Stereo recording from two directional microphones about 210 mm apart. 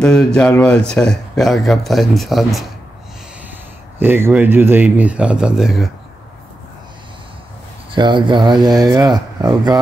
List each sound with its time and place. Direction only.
0.0 s speech: 5° left (ahead or behind)
4.0 s speech: 10° right (ahead or behind)
7.9 s speech: 20° right (ahead or behind)